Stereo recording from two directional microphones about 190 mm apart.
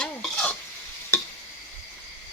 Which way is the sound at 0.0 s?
5° left (ahead or behind).